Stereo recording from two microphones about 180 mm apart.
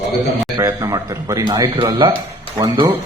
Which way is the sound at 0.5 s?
20° right (ahead or behind).